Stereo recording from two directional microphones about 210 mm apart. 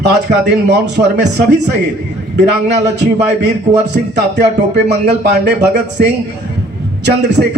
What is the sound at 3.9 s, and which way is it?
Speech, 55° right (ahead or behind).